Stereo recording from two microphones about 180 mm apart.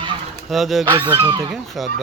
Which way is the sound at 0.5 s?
Centre (ahead or behind).